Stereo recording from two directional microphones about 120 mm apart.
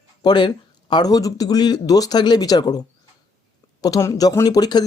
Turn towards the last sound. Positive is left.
turn(degrees=35)  # may be behind; listen again after turning